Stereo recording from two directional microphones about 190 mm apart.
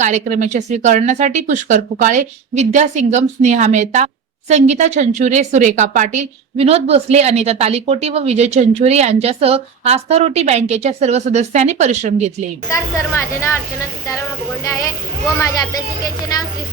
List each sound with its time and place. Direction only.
0.0 s speech: 40° right (ahead or behind)
12.6 s a woman's voice: 15° left (ahead or behind)